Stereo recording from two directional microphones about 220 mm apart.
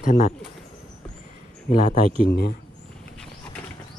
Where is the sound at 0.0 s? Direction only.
35° left (ahead or behind).